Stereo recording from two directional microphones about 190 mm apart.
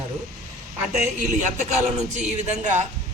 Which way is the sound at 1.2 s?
40° right (ahead or behind).